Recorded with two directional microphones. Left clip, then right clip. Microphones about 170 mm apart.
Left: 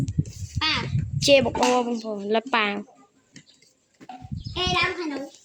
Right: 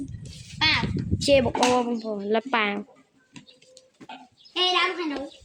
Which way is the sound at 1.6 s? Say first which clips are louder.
Left 1 dB; centre (ahead or behind).